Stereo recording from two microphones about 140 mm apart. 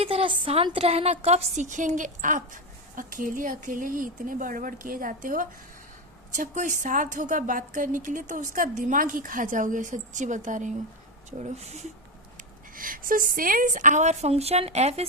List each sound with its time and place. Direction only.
0.0 s a woman's voice: 45° right (ahead or behind)
12.7 s a woman's voice: 80° right; by 15.0 s 50° right (ahead or behind)